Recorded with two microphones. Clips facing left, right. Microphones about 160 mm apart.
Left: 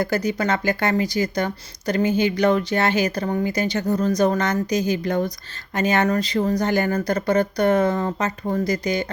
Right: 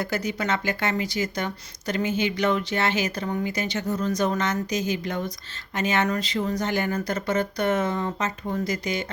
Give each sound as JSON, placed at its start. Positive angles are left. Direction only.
{"t": 0.0, "sound": "speech", "side_deg": 40}